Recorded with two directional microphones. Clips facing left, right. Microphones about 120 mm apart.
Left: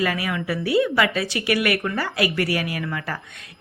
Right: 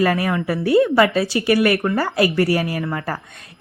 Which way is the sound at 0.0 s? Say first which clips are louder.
Right 6 dB; 40° right (ahead or behind).